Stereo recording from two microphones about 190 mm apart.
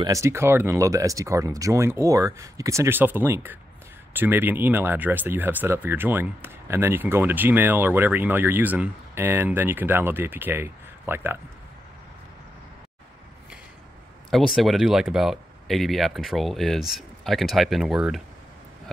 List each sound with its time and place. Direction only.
0.0 s speech: 15° right (ahead or behind)
14.3 s speech: centre (ahead or behind)